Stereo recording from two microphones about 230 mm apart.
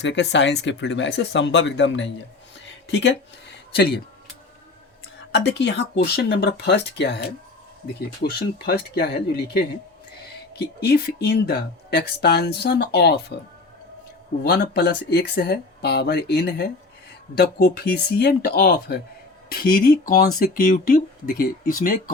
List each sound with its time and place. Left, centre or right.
0.0 s speech: left
5.3 s speech: left
10.8 s speech: left
14.4 s speech: left